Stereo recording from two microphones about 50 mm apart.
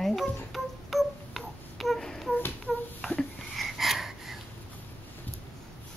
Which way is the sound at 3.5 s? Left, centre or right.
Centre.